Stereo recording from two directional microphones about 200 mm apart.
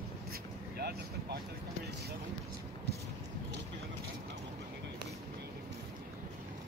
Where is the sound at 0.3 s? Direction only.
50° right (ahead or behind).